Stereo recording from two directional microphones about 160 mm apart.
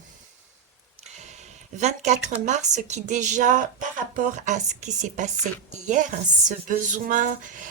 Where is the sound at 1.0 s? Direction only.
45° right (ahead or behind).